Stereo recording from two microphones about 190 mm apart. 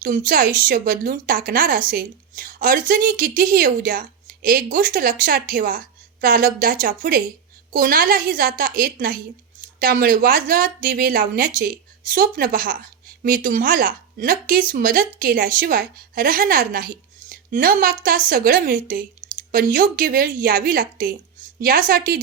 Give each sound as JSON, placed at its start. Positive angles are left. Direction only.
{"t": 0.0, "sound": "speech", "side_deg": -45}